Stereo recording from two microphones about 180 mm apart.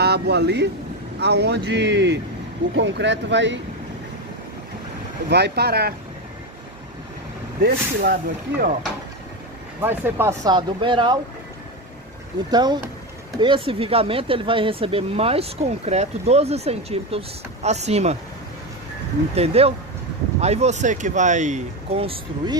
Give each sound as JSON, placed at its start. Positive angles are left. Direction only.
{"t": 0.0, "sound": "speech", "side_deg": -65}
{"t": 5.3, "sound": "speech", "side_deg": -65}
{"t": 7.6, "sound": "speech", "side_deg": -60}
{"t": 9.8, "sound": "speech", "side_deg": -10}
{"t": 12.4, "sound": "speech", "side_deg": -25}
{"t": 19.3, "sound": "speech", "side_deg": -35}